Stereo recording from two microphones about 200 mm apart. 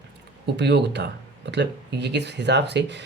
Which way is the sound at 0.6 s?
60° right (ahead or behind).